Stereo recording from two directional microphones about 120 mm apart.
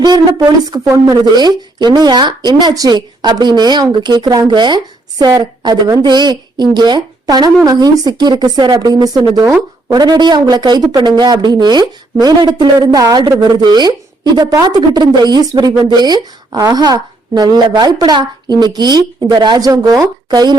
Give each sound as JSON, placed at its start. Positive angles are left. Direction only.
{"t": 0.0, "sound": "a woman's voice", "side_deg": -35}